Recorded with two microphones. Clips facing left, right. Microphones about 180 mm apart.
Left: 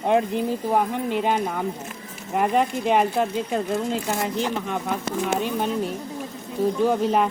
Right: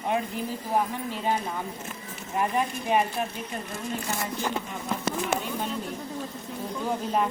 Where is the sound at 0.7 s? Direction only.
70° left (ahead or behind).